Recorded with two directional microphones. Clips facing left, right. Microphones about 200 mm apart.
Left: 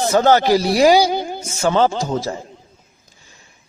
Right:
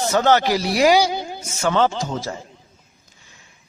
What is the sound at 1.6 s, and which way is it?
Speech, 35° left (ahead or behind).